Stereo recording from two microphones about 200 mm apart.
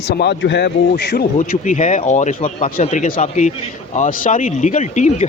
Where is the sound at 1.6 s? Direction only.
40° left (ahead or behind).